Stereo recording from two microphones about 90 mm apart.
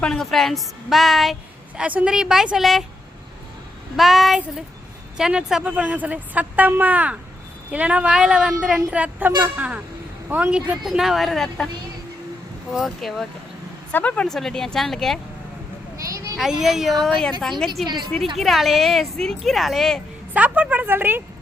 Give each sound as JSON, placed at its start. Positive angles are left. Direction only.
{"t": 0.0, "sound": "a woman's voice", "side_deg": 5}
{"t": 1.7, "sound": "a woman's voice", "side_deg": -15}
{"t": 3.9, "sound": "a woman's voice", "side_deg": 0}
{"t": 10.8, "sound": "a woman's voice", "side_deg": -5}
{"t": 12.7, "sound": "a woman's voice", "side_deg": 0}
{"t": 13.9, "sound": "speech", "side_deg": 15}
{"t": 14.3, "sound": "a woman's voice", "side_deg": 5}
{"t": 16.0, "sound": "a sound", "side_deg": -40}
{"t": 16.4, "sound": "a woman's voice", "side_deg": -5}
{"t": 20.3, "sound": "a woman's voice", "side_deg": -15}